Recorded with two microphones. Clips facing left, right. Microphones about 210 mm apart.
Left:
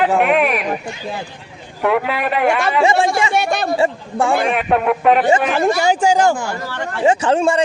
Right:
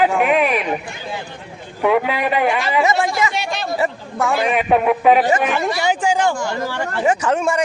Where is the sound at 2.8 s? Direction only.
30° left (ahead or behind).